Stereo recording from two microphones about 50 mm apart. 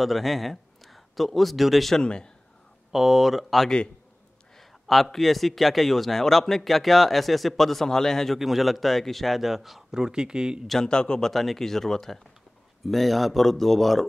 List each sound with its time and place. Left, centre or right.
0.0 s speech: centre
2.0 s speech: centre
2.9 s speech: centre
8.4 s speech: centre
9.9 s speech: centre
10.7 s speech: centre